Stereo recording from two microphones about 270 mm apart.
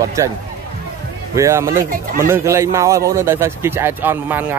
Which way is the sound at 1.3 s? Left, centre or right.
Centre.